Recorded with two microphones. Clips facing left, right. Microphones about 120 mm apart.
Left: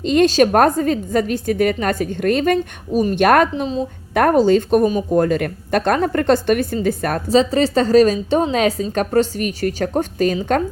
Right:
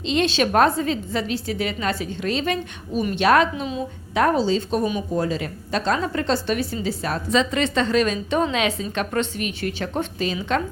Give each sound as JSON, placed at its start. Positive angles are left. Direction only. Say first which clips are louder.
{"t": 0.0, "sound": "a woman's voice", "louder": "left 7 dB", "side_deg": 50}
{"t": 3.5, "sound": "a woman's voice", "louder": "left 6 dB", "side_deg": 30}
{"t": 4.1, "sound": "speech", "louder": "left 6 dB", "side_deg": 55}
{"t": 7.3, "sound": "a woman's voice", "louder": "left 6 dB", "side_deg": 35}